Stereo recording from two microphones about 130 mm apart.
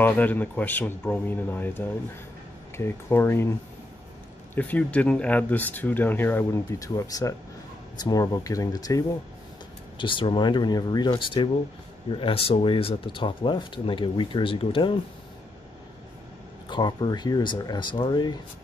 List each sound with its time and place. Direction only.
0.0 s speech: 15° left (ahead or behind)
4.6 s speech: 10° left (ahead or behind); by 9.0 s 25° left (ahead or behind)
9.9 s speech: 40° left (ahead or behind)
16.6 s speech: 35° left (ahead or behind)